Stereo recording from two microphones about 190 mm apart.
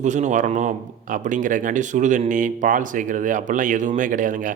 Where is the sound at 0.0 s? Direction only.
40° right (ahead or behind).